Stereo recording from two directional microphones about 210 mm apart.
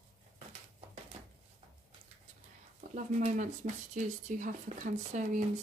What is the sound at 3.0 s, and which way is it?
Speech, 35° right (ahead or behind).